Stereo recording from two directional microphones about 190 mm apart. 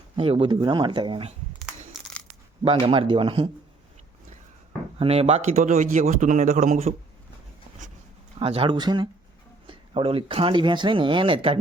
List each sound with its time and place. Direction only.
0.2 s speech: 30° right (ahead or behind)
2.6 s speech: 30° right (ahead or behind)
4.9 s a man's voice: 30° right (ahead or behind)
8.4 s speech: 30° right (ahead or behind)